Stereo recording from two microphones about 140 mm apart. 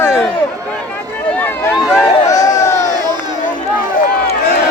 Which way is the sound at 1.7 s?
5° right (ahead or behind).